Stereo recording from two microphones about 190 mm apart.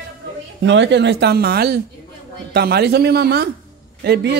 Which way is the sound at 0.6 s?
70° right (ahead or behind).